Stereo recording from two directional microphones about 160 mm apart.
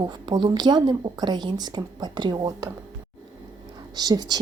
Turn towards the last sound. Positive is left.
turn(degrees=-25)  # may be behind; listen again after turning